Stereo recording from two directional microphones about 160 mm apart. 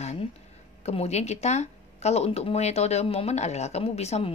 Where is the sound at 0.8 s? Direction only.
40° left (ahead or behind).